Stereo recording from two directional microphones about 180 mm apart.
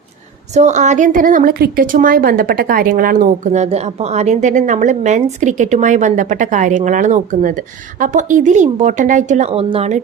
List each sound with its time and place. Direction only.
0.5 s a woman's voice: 40° right (ahead or behind)